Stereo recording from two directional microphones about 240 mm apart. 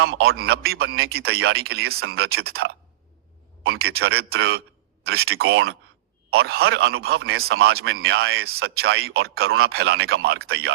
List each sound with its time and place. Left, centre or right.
0.0 s a man's voice: right